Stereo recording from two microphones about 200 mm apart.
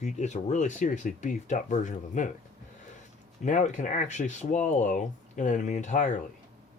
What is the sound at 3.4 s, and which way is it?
Speech, 40° left (ahead or behind).